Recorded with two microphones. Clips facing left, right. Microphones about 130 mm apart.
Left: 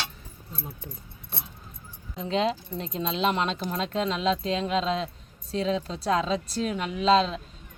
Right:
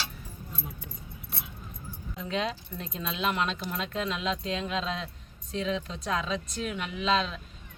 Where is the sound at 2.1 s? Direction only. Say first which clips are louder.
Left 6 dB; 30° left (ahead or behind).